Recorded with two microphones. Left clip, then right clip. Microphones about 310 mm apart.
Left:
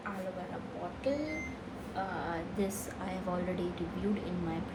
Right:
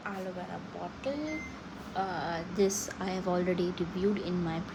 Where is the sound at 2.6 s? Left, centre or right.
Right.